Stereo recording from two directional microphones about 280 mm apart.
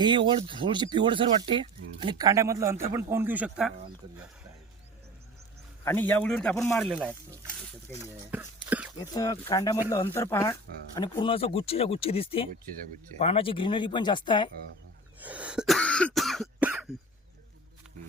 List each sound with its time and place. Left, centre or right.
0.0 s speech: centre
5.8 s speech: centre
8.3 s a sound: centre
9.0 s speech: centre
15.2 s cough: centre